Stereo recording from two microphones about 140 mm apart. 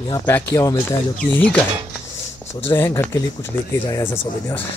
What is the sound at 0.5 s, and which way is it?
Speech, 25° left (ahead or behind).